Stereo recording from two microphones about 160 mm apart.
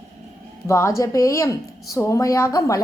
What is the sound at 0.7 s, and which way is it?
A woman's voice, 20° left (ahead or behind).